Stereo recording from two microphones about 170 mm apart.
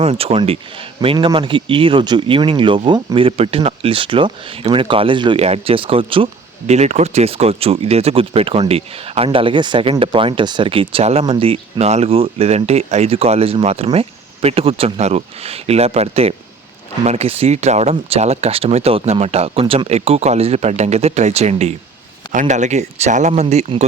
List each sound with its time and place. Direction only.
0.0 s speech: 35° right (ahead or behind)